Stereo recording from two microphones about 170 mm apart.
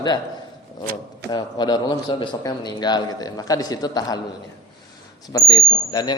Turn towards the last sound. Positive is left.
turn(degrees=25)  # may be behind; listen again after turning